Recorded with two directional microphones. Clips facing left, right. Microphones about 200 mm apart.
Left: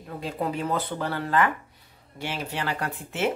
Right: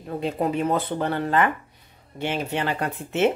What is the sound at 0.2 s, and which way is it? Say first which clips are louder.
Speech: right 5 dB; 20° right (ahead or behind).